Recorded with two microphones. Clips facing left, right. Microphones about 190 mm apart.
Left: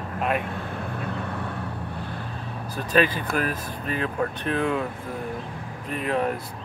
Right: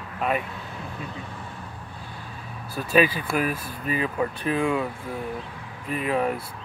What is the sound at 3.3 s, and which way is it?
Speech, 10° right (ahead or behind).